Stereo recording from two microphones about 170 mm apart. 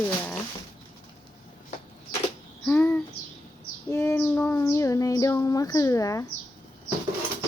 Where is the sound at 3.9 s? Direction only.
15° left (ahead or behind).